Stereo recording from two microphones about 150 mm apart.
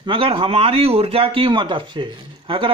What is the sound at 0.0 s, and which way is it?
Speech, 35° right (ahead or behind).